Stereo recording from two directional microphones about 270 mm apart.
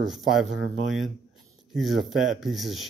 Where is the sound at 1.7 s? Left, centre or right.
Centre.